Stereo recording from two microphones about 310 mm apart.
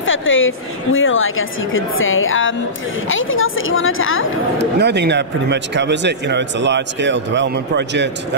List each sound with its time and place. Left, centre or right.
0.0 s a woman's voice: left
4.6 s speech: right